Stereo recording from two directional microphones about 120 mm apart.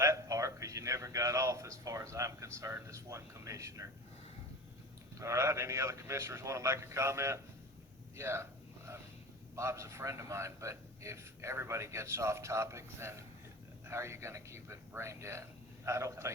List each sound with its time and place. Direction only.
0.0 s a sound: 25° right (ahead or behind)
5.2 s a man's voice: 25° right (ahead or behind)
9.6 s a man's voice: 25° right (ahead or behind)